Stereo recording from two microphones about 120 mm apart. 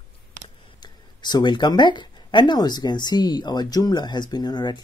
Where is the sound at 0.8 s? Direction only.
35° left (ahead or behind).